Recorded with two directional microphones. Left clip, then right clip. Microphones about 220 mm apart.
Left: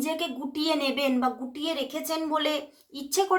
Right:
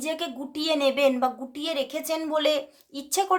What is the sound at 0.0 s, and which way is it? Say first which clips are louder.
A woman's voice: even; 30° right (ahead or behind).